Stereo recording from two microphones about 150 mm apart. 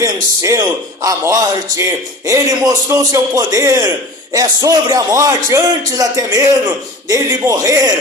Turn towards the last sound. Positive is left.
turn(degrees=-25)  # may be behind; listen again after turning